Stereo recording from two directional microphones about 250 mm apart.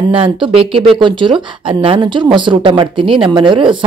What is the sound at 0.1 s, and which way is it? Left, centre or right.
Speech, right.